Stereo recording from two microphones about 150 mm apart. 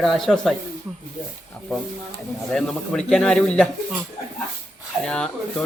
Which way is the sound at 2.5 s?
5° left (ahead or behind).